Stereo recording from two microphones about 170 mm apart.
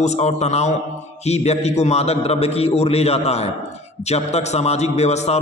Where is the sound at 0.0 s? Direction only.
40° left (ahead or behind).